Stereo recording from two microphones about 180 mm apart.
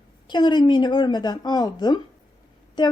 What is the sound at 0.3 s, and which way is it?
A woman's voice, 25° left (ahead or behind).